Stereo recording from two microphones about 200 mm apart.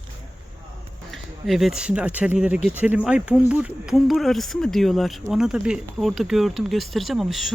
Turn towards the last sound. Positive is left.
turn(degrees=0)  # may be behind; listen again after turning